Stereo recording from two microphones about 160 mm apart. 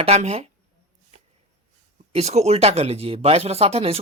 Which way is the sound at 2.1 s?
40° right (ahead or behind).